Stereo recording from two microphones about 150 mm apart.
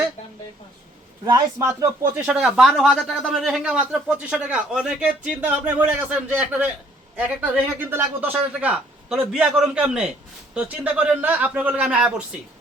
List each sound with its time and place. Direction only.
1.2 s speech: 25° right (ahead or behind)
2.2 s speech: 5° right (ahead or behind)